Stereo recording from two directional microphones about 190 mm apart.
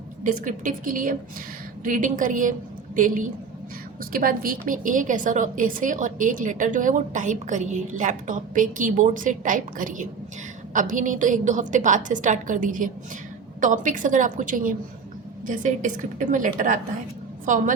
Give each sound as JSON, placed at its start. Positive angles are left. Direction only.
{"t": 0.3, "sound": "a woman's voice", "side_deg": -45}